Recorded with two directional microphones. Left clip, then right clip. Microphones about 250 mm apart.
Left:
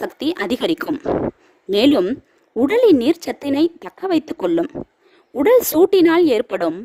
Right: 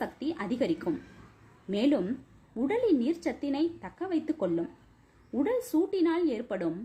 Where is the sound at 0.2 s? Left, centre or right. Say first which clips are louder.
Left 13 dB; left.